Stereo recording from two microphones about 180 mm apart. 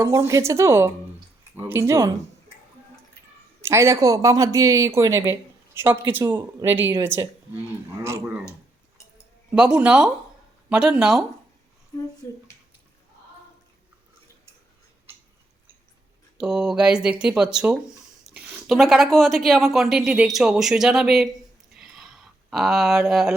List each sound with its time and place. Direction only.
0.0 s speech: 15° right (ahead or behind)
3.6 s speech: 15° right (ahead or behind)
9.5 s speech: 5° right (ahead or behind)
16.4 s speech: 5° right (ahead or behind)
21.7 s a sound: centre (ahead or behind)